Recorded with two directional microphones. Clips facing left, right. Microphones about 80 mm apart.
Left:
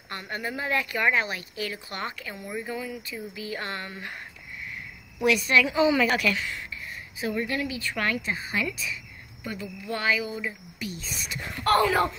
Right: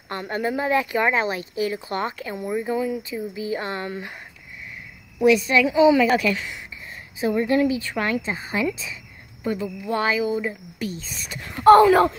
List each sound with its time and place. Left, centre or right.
0.1 s speech: right
5.2 s a woman's voice: centre
6.1 s speech: right
11.9 s speech: right